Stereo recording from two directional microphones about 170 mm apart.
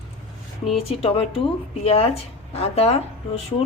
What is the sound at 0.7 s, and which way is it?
Speech, 35° left (ahead or behind).